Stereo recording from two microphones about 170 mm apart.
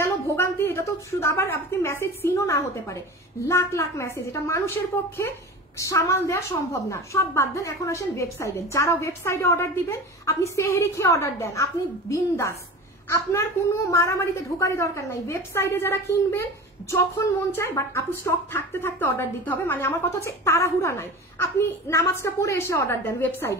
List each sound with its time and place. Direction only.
0.0 s a woman's voice: 15° left (ahead or behind)
5.8 s a woman's voice: 15° left (ahead or behind)
17.5 s a woman's voice: 15° left (ahead or behind)